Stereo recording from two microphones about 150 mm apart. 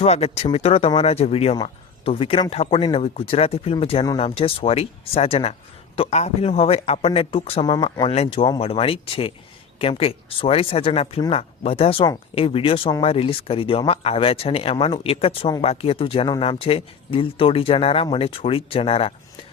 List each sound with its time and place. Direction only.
0.0 s speech: 45° left (ahead or behind)